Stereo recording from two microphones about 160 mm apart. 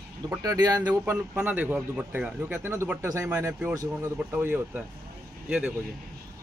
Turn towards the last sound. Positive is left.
turn(degrees=-5)  # may be behind; listen again after turning